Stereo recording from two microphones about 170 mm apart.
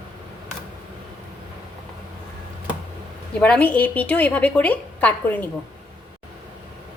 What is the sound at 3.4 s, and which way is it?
A woman's voice, 10° left (ahead or behind).